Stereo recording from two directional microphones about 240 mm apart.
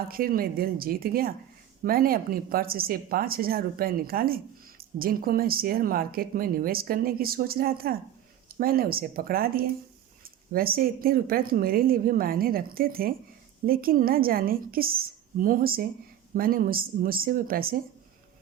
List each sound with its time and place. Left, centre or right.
0.1 s speech: right